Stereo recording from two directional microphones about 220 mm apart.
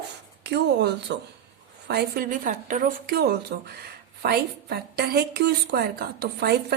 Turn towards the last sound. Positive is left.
turn(degrees=-45)  # may be behind; listen again after turning